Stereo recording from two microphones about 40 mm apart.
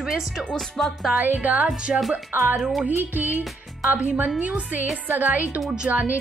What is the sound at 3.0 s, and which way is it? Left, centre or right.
Speech, right.